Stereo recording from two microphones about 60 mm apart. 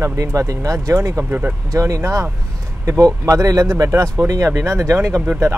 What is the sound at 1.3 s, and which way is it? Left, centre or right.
Speech, right.